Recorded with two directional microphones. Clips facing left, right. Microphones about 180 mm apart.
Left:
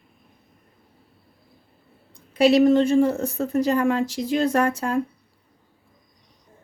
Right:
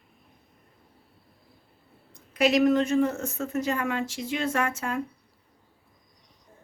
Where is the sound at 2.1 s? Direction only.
30° left (ahead or behind).